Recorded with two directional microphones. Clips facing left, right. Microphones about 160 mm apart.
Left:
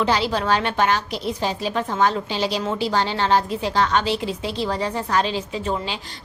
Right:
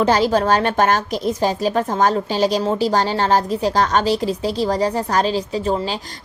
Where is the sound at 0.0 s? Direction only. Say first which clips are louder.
Right 5 dB; 45° right (ahead or behind).